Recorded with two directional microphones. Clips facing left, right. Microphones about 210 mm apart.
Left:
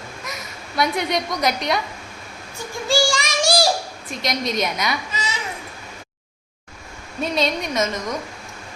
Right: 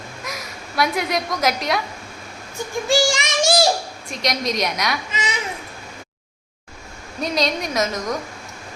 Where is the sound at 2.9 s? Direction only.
20° right (ahead or behind).